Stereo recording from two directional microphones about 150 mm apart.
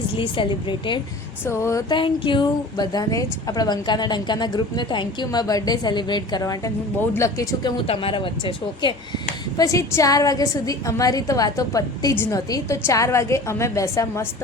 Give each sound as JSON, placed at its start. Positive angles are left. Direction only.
{"t": 0.2, "sound": "speech", "side_deg": 35}
{"t": 1.5, "sound": "a sound", "side_deg": 20}
{"t": 1.9, "sound": "a woman's voice", "side_deg": 35}
{"t": 7.9, "sound": "speech", "side_deg": 35}
{"t": 9.6, "sound": "a woman's voice", "side_deg": 20}